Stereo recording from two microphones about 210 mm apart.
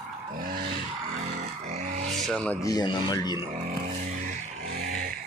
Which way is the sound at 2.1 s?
Centre (ahead or behind).